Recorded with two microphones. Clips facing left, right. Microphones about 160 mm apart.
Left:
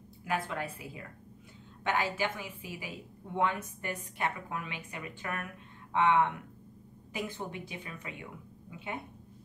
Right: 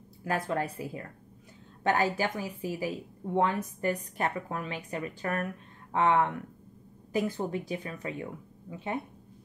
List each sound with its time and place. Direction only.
0.3 s a woman's voice: 40° right (ahead or behind)